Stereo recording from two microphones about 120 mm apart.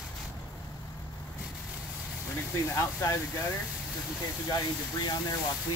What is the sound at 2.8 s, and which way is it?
Speech, 25° left (ahead or behind).